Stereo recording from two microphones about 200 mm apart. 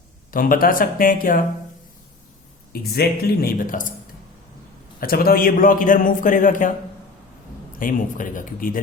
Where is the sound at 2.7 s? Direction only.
50° left (ahead or behind).